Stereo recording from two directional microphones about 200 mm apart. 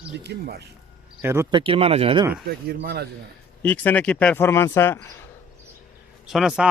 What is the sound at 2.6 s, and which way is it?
Speech, 55° right (ahead or behind).